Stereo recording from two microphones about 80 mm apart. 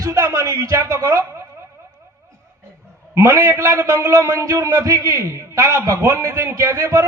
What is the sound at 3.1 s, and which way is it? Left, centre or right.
A man's voice, right.